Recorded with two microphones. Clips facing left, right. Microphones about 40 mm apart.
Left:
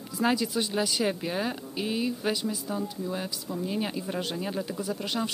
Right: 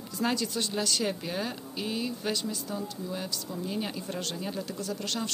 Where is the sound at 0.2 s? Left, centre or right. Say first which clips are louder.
Left 3 dB; centre.